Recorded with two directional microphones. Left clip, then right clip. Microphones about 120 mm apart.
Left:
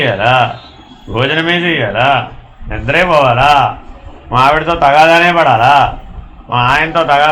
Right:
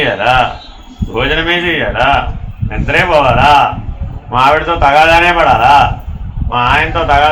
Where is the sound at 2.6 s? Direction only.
35° left (ahead or behind).